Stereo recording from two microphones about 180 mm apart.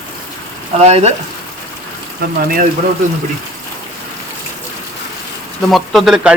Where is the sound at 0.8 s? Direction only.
35° right (ahead or behind).